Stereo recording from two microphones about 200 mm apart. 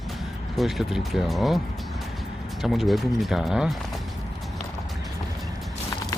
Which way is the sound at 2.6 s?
Centre (ahead or behind).